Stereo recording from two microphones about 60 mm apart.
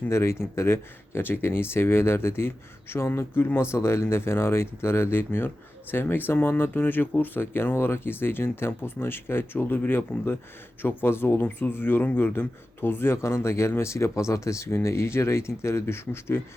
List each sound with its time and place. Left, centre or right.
0.1 s speech: left